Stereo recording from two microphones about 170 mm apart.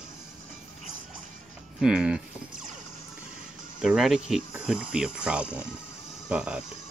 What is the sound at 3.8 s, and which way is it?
Cricket, centre (ahead or behind).